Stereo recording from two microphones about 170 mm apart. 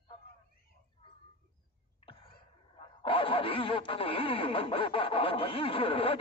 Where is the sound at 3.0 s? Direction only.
30° left (ahead or behind).